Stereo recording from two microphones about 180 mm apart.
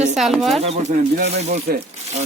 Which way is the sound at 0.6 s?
35° right (ahead or behind).